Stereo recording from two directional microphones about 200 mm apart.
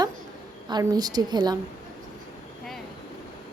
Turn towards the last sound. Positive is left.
turn(degrees=-20)  # may be behind; listen again after turning